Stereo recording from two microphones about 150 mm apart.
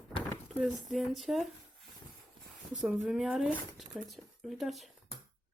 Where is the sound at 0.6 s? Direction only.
Centre (ahead or behind).